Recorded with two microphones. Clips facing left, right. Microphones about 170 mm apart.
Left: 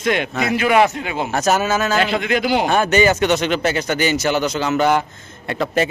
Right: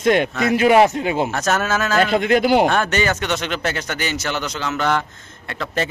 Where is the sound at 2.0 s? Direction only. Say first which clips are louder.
Right 3 dB; 40° right (ahead or behind).